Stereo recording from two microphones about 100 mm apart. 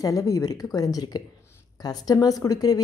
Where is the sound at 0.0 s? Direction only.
35° left (ahead or behind).